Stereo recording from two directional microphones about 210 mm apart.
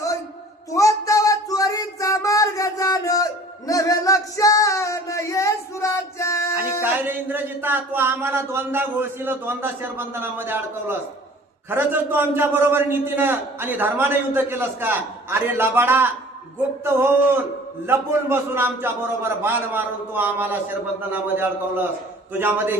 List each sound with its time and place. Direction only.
0.7 s a sound: 15° left (ahead or behind)
3.7 s music: 15° left (ahead or behind)
6.6 s speech: 10° right (ahead or behind)